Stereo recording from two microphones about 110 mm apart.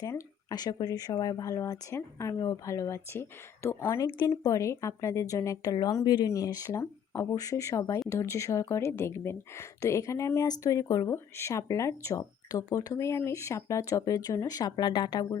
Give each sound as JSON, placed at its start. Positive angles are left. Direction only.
{"t": 0.0, "sound": "speech", "side_deg": 30}